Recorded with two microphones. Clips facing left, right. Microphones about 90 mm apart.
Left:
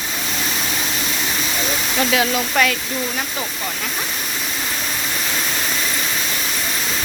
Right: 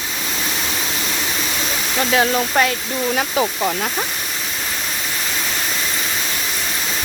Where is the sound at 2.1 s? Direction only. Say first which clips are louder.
Right 3 dB; 30° right (ahead or behind).